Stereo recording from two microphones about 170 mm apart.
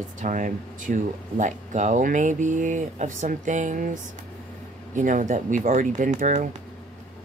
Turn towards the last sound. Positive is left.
turn(degrees=-45)  # may be behind; listen again after turning